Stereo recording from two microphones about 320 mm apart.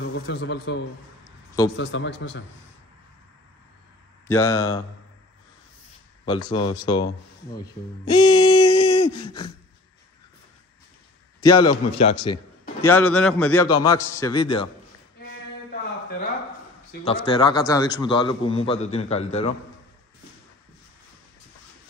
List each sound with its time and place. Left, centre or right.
0.0 s a man's voice: left
4.3 s a man's voice: centre
6.5 s a man's voice: centre
7.6 s a sound: centre
11.4 s a man's voice: centre
12.8 s a man's voice: centre
17.0 s a man's voice: centre